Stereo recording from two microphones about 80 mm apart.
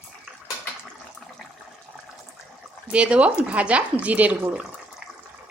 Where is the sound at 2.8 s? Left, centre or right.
Centre.